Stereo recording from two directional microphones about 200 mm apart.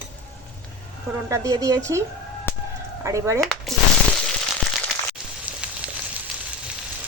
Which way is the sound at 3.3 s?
5° left (ahead or behind).